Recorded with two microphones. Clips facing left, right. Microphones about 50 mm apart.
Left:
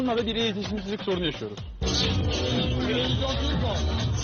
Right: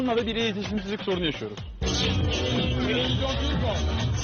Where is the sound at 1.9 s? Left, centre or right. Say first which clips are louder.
Even; right.